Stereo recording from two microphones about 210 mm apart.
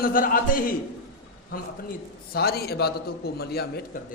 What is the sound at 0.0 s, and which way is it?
A man's voice, 40° left (ahead or behind).